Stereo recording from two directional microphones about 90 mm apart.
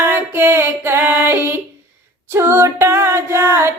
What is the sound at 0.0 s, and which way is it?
Female singing, 25° right (ahead or behind).